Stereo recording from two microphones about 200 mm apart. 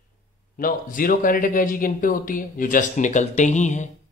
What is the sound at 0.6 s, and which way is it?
Speech, 45° left (ahead or behind).